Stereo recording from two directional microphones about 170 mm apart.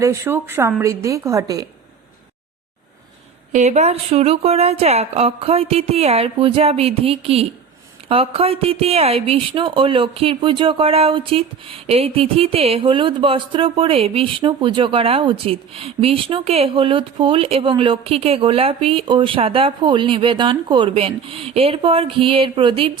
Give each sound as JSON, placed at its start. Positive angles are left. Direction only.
{"t": 0.0, "sound": "a woman's voice", "side_deg": -15}
{"t": 3.5, "sound": "speech", "side_deg": -40}